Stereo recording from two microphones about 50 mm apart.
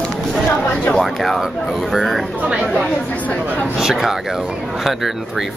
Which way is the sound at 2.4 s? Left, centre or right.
Right.